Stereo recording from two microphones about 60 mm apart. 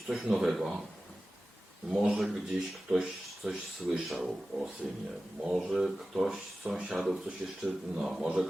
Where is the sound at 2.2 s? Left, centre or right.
Centre.